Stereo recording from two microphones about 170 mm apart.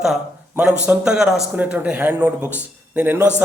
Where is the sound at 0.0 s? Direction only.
5° right (ahead or behind).